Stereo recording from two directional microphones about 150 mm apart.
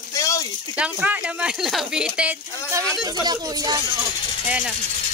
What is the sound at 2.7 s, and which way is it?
Speech, 20° right (ahead or behind).